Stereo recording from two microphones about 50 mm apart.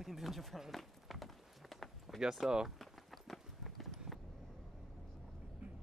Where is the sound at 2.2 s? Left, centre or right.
Centre.